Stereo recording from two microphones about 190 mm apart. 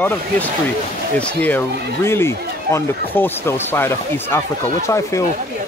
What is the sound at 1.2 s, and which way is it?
Speech, 5° left (ahead or behind).